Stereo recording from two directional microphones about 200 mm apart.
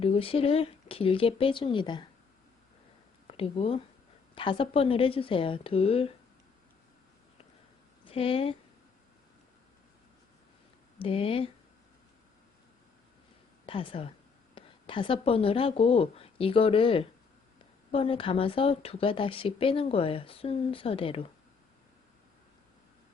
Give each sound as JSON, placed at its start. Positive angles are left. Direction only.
{"t": 0.0, "sound": "speech", "side_deg": 30}
{"t": 3.2, "sound": "speech", "side_deg": 30}
{"t": 8.0, "sound": "a woman's voice", "side_deg": 25}
{"t": 11.0, "sound": "speech", "side_deg": 25}
{"t": 13.7, "sound": "a woman's voice", "side_deg": 25}